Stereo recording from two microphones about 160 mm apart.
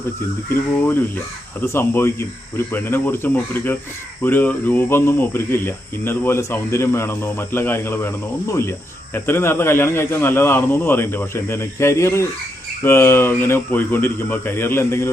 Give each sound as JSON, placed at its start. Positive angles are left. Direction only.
{"t": 1.6, "sound": "speech", "side_deg": 15}